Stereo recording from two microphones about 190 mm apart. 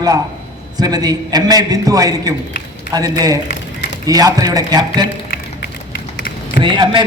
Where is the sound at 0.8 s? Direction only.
20° right (ahead or behind).